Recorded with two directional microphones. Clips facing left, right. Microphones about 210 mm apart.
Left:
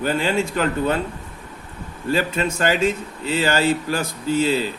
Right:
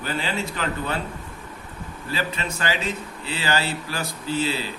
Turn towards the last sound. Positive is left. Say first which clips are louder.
# left 6 dB
turn(degrees=45)  # may be behind; listen again after turning